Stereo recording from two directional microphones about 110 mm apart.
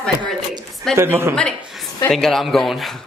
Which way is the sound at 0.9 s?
20° right (ahead or behind).